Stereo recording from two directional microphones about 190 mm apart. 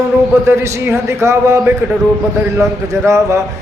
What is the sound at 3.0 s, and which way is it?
Speech, 15° right (ahead or behind).